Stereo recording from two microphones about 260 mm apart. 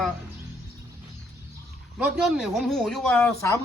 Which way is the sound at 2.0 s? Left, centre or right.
Centre.